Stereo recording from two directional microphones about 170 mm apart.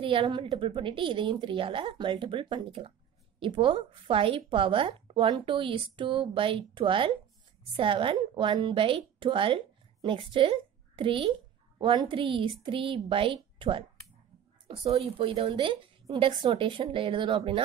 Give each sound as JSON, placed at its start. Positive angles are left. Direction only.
{"t": 0.0, "sound": "a woman's voice", "side_deg": -30}